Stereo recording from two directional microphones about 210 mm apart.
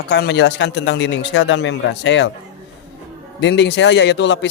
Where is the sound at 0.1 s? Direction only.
55° left (ahead or behind).